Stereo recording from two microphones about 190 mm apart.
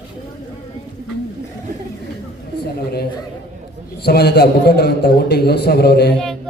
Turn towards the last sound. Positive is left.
turn(degrees=60)  # may be behind; listen again after turning